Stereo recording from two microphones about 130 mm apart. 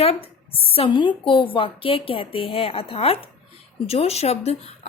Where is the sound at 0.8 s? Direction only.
40° left (ahead or behind); by 4.9 s 55° left (ahead or behind).